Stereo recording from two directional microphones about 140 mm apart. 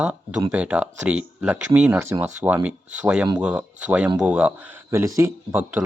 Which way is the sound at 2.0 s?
20° right (ahead or behind).